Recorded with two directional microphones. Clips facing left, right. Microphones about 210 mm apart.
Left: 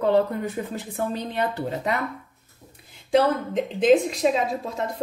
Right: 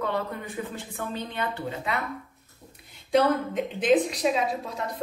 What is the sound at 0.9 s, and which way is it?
A woman's voice, 40° left (ahead or behind).